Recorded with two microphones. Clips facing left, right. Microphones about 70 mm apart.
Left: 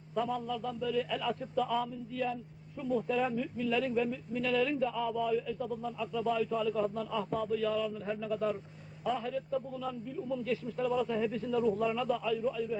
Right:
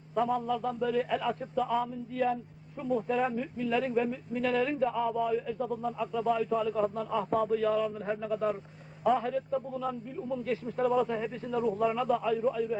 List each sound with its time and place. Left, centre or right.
0.2 s speech: right
1.2 s speech: right
2.1 s speech: right
5.5 s speech: right
9.0 s speech: right